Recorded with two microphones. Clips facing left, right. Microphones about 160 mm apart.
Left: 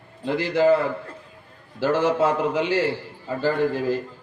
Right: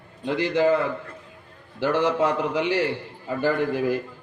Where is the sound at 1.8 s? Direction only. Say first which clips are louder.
Left 1 dB; 15° right (ahead or behind).